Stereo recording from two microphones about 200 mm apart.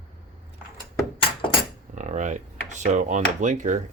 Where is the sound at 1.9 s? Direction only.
35° right (ahead or behind).